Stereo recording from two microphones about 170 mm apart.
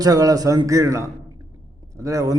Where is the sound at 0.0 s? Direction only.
20° right (ahead or behind).